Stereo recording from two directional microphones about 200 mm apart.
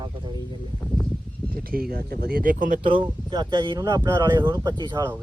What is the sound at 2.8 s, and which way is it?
Speech, 25° right (ahead or behind).